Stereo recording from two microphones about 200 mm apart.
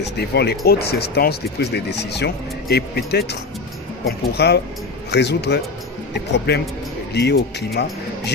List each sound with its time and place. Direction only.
0.0 s speech: 55° left (ahead or behind)